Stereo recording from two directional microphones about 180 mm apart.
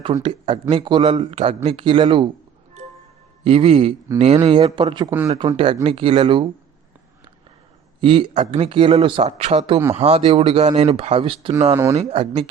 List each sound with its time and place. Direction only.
0.0 s a man's voice: 30° right (ahead or behind)
3.4 s a man's voice: 30° right (ahead or behind)
5.1 s speech: 10° right (ahead or behind)
5.4 s a man's voice: 30° right (ahead or behind)
8.0 s a man's voice: 30° right (ahead or behind)
11.7 s speech: 15° right (ahead or behind)
11.9 s speech: 35° right (ahead or behind)